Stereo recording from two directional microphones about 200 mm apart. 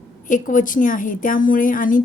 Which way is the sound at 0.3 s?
40° left (ahead or behind).